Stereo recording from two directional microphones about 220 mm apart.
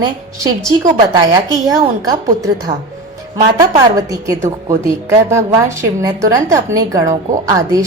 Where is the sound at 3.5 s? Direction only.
15° right (ahead or behind).